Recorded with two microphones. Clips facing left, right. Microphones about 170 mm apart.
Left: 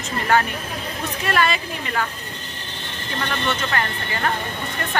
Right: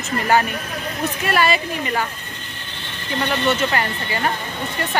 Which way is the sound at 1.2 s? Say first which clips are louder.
Right 2 dB; 5° right (ahead or behind).